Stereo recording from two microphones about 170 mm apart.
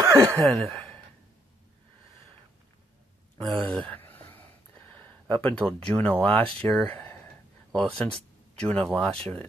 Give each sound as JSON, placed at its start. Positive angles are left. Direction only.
{"t": 0.0, "sound": "speech", "side_deg": -15}
{"t": 0.5, "sound": "speech", "side_deg": 0}
{"t": 3.6, "sound": "a sound", "side_deg": 5}
{"t": 5.4, "sound": "speech", "side_deg": 5}